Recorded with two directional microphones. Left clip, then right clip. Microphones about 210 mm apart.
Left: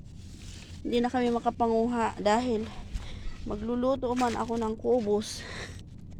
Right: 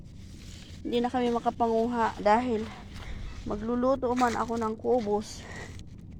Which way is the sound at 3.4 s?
10° right (ahead or behind).